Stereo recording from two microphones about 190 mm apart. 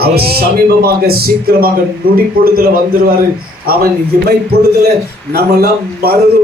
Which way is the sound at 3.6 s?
50° right (ahead or behind).